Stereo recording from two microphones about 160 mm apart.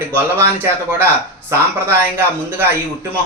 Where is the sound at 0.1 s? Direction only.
15° right (ahead or behind).